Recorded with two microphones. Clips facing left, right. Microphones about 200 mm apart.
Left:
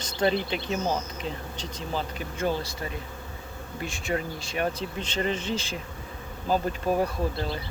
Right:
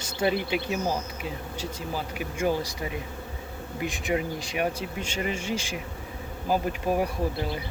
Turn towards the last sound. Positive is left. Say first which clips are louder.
# even
turn(degrees=-10)  # may be behind; listen again after turning